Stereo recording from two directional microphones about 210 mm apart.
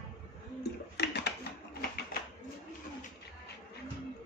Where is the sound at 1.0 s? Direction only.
50° left (ahead or behind).